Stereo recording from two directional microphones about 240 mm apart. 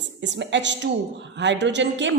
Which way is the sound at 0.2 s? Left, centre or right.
Right.